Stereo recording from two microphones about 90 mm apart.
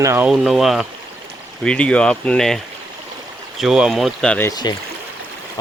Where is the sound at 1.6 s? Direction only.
10° left (ahead or behind).